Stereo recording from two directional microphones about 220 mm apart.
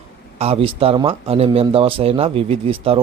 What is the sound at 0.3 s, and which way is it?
Speech, 25° right (ahead or behind).